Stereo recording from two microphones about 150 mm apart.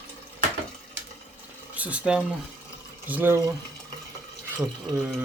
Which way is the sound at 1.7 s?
10° right (ahead or behind).